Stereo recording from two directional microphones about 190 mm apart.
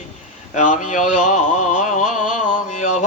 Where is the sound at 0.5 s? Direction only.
40° left (ahead or behind).